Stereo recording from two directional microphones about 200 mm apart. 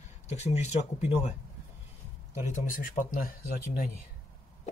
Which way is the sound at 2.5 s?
40° left (ahead or behind).